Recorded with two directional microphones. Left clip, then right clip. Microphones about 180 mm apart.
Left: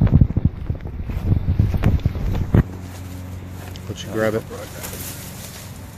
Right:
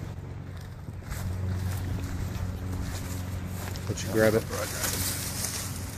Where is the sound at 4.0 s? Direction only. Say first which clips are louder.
Left 2 dB; 10° left (ahead or behind).